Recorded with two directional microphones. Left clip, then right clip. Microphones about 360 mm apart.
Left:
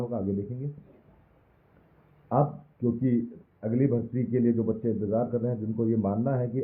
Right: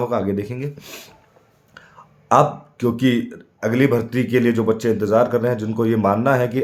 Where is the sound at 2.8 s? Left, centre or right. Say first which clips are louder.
Right 9 dB; centre.